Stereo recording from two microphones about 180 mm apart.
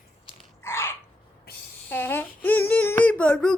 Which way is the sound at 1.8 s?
10° left (ahead or behind).